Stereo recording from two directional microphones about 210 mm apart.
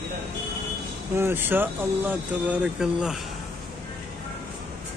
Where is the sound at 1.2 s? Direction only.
10° right (ahead or behind).